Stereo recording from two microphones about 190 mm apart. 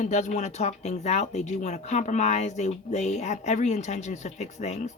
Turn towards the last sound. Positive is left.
turn(degrees=35)  # may be behind; listen again after turning